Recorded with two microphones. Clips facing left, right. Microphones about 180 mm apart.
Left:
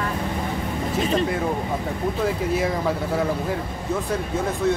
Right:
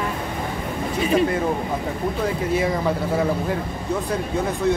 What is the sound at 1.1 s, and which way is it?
Speech, centre (ahead or behind).